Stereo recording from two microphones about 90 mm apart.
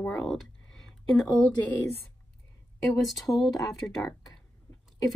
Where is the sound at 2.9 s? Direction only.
Centre (ahead or behind).